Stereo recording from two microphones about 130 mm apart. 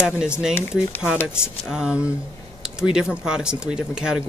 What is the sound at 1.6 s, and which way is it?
Speech, 5° right (ahead or behind).